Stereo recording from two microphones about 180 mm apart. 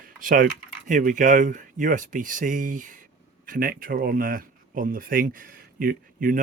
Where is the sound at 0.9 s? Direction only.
45° right (ahead or behind).